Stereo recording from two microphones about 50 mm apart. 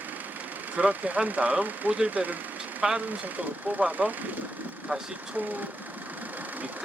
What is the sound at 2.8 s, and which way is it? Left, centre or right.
Speech, centre.